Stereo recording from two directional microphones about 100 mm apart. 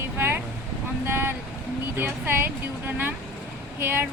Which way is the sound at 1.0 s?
20° right (ahead or behind).